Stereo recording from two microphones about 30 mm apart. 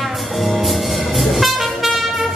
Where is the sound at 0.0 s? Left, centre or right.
Centre.